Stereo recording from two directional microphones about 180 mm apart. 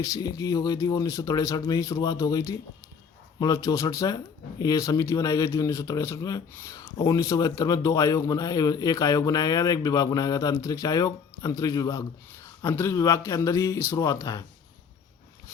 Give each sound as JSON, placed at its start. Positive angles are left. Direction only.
{"t": 0.0, "sound": "speech", "side_deg": 20}